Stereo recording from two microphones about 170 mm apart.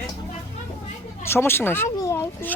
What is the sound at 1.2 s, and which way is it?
Speech, 15° left (ahead or behind).